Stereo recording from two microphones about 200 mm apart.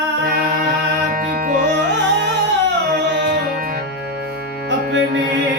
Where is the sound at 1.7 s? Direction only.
60° right (ahead or behind).